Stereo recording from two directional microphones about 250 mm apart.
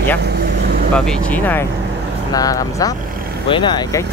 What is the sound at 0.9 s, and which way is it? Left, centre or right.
Speech, centre.